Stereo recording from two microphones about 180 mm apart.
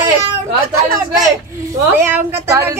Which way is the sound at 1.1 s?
20° right (ahead or behind).